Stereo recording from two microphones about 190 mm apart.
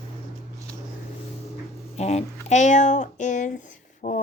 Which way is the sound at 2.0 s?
35° left (ahead or behind).